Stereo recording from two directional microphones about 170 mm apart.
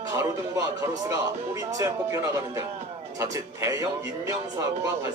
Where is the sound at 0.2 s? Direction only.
20° right (ahead or behind).